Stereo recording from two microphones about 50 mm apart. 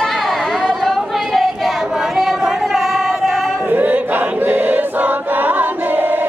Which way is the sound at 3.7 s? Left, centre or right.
Right.